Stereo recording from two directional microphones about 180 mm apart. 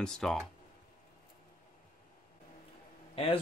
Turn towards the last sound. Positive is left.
turn(degrees=30)  # may be behind; listen again after turning